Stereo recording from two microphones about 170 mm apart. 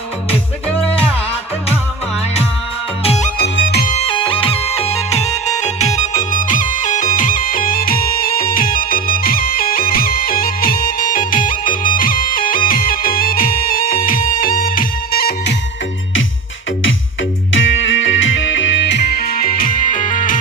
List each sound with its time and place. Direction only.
3.0 s music: 35° left (ahead or behind)
3.3 s music: 90° left
3.8 s music: 35° left (ahead or behind); by 15.5 s 65° left (ahead or behind)
17.7 s music: 90° left; by 20.4 s 50° left (ahead or behind)